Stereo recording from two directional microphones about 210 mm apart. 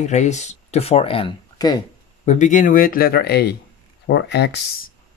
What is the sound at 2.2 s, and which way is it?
Speech, 35° left (ahead or behind).